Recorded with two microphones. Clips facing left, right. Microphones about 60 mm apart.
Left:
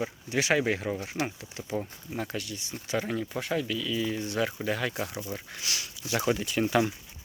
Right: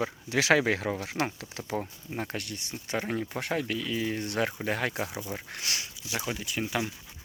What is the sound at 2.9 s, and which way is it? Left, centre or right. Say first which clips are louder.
Speech: left 1 dB; right.